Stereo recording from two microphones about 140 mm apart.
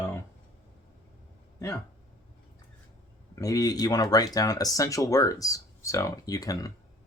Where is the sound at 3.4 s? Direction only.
25° left (ahead or behind).